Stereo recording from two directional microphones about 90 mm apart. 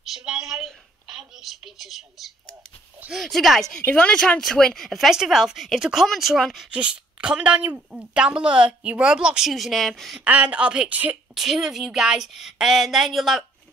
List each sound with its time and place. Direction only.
0.1 s a woman's voice: 5° right (ahead or behind)
6.7 s a woman's voice: 10° right (ahead or behind)
10.2 s a woman's voice: 15° right (ahead or behind)
11.3 s a woman's voice: 5° right (ahead or behind)